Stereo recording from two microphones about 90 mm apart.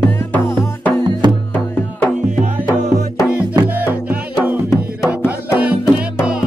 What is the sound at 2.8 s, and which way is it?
Music, 10° right (ahead or behind).